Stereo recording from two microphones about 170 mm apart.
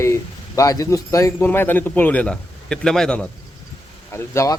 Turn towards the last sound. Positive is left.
turn(degrees=20)  # may be behind; listen again after turning